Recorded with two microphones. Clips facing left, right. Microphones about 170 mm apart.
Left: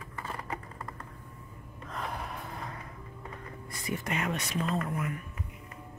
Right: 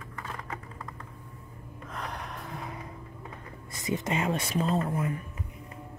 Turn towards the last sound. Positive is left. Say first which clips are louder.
# right 4 dB
turn(degrees=-30)  # may be behind; listen again after turning